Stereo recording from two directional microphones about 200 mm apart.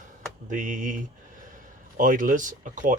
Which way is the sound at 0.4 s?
40° right (ahead or behind).